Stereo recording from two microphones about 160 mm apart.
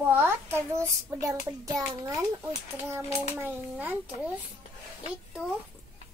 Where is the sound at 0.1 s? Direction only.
15° right (ahead or behind).